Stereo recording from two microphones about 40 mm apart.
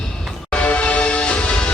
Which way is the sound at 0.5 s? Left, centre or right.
Left.